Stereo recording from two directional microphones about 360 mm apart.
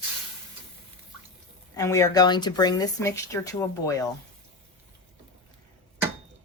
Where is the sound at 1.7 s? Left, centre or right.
Centre.